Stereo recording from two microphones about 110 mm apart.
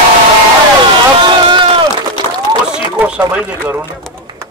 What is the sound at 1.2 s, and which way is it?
Run, 45° right (ahead or behind).